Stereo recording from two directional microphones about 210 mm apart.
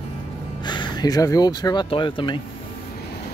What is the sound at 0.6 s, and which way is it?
Speech, 20° left (ahead or behind).